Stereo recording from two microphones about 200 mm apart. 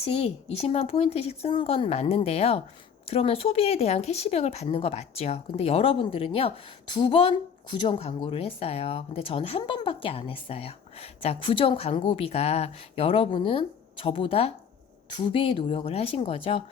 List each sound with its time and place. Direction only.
0.0 s speech: 30° left (ahead or behind)